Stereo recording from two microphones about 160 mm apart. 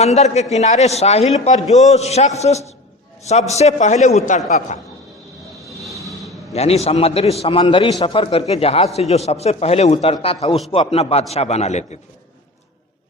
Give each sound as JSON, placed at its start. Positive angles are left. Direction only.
{"t": 0.0, "sound": "a man's voice", "side_deg": 45}
{"t": 5.8, "sound": "a sound", "side_deg": 0}
{"t": 6.5, "sound": "a man's voice", "side_deg": 40}